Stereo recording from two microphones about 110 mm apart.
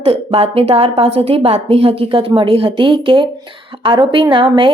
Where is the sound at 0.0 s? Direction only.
60° right (ahead or behind).